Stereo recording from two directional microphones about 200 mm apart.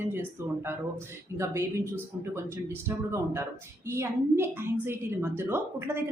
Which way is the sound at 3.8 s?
15° right (ahead or behind).